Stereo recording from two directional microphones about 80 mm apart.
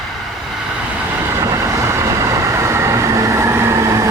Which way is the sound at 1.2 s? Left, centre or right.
Right.